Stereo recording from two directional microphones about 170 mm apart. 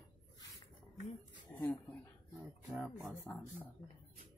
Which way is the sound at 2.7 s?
15° right (ahead or behind).